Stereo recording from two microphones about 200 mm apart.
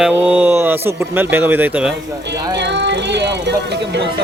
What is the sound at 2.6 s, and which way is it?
Music, 60° right (ahead or behind).